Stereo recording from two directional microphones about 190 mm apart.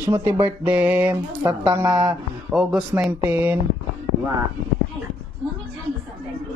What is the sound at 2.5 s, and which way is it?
Speech, 5° right (ahead or behind).